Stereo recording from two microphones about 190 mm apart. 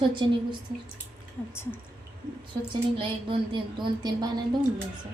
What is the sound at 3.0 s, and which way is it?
A woman's voice, 25° right (ahead or behind).